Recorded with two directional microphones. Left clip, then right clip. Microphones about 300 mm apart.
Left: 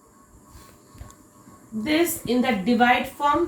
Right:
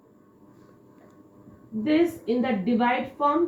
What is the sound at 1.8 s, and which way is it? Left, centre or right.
A woman's voice, centre.